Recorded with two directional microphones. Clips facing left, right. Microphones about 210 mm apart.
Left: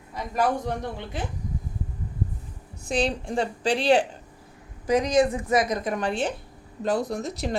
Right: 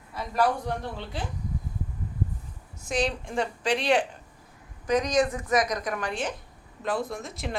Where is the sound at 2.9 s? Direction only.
30° left (ahead or behind).